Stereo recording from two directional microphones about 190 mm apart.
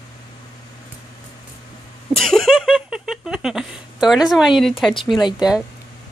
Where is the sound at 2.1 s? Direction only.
Centre (ahead or behind).